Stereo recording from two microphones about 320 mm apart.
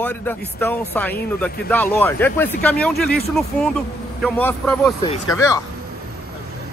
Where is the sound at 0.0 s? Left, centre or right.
Centre.